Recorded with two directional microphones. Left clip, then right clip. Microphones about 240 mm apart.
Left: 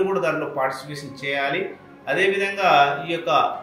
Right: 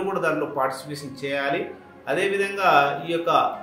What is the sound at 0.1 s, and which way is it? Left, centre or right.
A man's voice, right.